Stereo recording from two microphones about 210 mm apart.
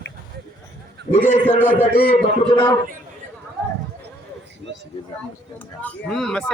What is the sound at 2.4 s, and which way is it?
Speech, 20° left (ahead or behind).